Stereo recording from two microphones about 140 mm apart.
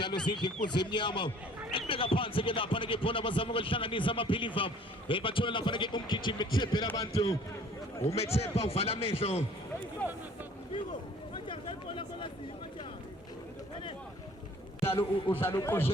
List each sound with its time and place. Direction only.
0.3 s speech: 35° left (ahead or behind)
8.0 s a man's voice: 45° left (ahead or behind)
10.0 s a man's voice: 10° left (ahead or behind)
11.4 s chatter: 35° left (ahead or behind)
14.9 s a man's voice: 15° left (ahead or behind)